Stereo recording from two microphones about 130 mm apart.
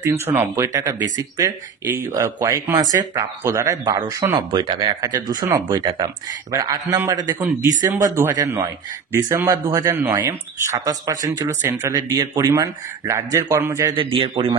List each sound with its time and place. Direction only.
0.0 s speech: 20° right (ahead or behind)
4.5 s speech: 40° right (ahead or behind)
10.0 s speech: 20° right (ahead or behind)
13.9 s a man's voice: 45° right (ahead or behind)